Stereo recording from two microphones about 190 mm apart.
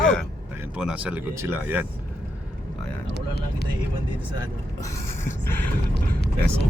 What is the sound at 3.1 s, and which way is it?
Vehicle, 60° left (ahead or behind).